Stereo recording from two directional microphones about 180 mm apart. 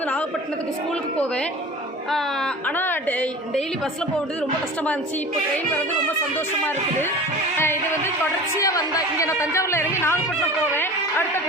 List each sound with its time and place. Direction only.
2.0 s a woman's voice: 5° left (ahead or behind)
6.3 s a woman's voice: 10° left (ahead or behind)